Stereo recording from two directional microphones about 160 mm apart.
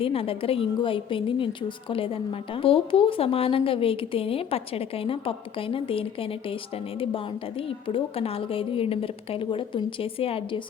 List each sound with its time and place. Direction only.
0.0 s a woman's voice: 35° left (ahead or behind)